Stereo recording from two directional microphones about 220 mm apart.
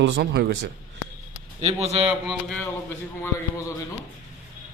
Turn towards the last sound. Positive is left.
turn(degrees=15)  # may be behind; listen again after turning